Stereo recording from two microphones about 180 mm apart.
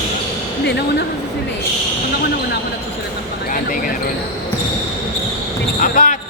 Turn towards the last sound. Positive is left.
turn(degrees=45)  # may be behind; listen again after turning